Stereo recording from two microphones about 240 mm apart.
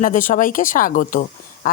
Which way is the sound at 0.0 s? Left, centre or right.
Left.